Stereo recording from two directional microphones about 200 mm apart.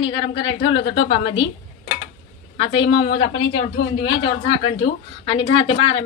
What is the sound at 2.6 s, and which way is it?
A woman's voice, 25° left (ahead or behind).